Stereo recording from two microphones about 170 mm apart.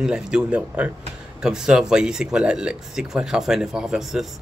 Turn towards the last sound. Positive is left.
turn(degrees=0)  # may be behind; listen again after turning